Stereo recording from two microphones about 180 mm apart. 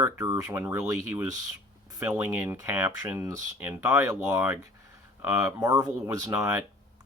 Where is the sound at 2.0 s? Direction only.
10° right (ahead or behind).